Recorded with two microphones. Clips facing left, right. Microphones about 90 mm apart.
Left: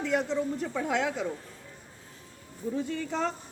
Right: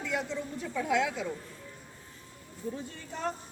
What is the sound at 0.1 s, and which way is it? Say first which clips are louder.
A woman's voice: left 6 dB; 45° left (ahead or behind).